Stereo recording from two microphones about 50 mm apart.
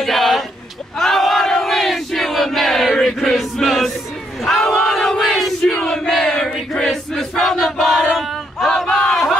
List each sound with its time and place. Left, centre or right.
0.0 s a sound: centre
0.9 s battle cry: centre
3.6 s music: centre
4.4 s battle cry: centre
8.8 s a sound: centre
9.1 s battle cry: centre